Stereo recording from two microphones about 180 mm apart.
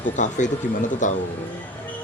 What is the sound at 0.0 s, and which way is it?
Speech, 45° left (ahead or behind).